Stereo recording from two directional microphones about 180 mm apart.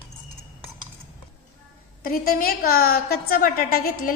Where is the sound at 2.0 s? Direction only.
55° left (ahead or behind).